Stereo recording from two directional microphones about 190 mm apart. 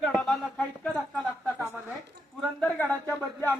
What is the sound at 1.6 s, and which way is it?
Speech, 15° right (ahead or behind).